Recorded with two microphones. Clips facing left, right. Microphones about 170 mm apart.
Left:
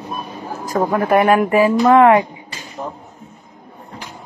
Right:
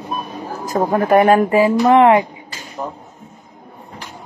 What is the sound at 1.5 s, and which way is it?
Speech, 20° right (ahead or behind).